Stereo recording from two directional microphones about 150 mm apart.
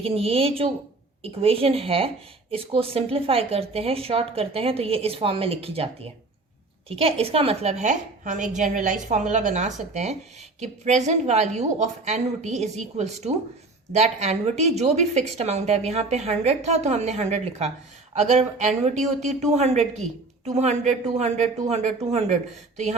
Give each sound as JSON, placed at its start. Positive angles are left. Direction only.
{"t": 0.0, "sound": "a woman's voice", "side_deg": -40}